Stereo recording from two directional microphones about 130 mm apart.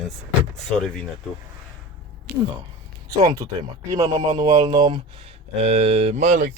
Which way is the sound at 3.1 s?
25° right (ahead or behind).